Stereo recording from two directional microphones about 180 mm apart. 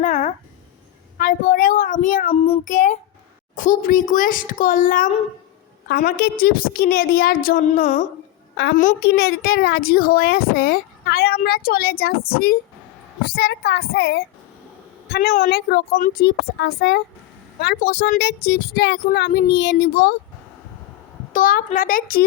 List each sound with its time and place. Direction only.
0.0 s a sound: 45° left (ahead or behind)
1.2 s a woman's voice: 55° left (ahead or behind)
2.3 s child singing: 35° left (ahead or behind)
3.5 s a woman's voice: 45° left (ahead or behind)
9.1 s a child's voice: 60° left (ahead or behind)
21.3 s a woman's voice: 50° left (ahead or behind)